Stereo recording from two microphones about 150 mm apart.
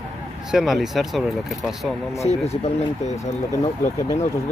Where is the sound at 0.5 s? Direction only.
Centre (ahead or behind).